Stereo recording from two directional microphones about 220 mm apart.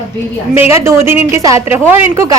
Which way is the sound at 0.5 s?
10° right (ahead or behind).